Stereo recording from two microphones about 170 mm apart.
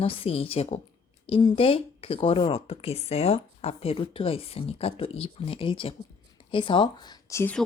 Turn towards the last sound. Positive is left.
turn(degrees=15)  # may be behind; listen again after turning